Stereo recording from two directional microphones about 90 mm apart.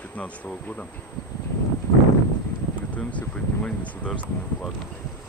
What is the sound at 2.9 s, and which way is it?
Speech, 15° left (ahead or behind).